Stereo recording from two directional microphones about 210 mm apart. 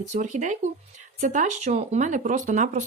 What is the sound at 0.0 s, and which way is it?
A woman's voice, 35° right (ahead or behind).